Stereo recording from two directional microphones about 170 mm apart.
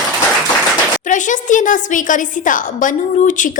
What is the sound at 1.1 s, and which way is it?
A woman's voice, 50° left (ahead or behind).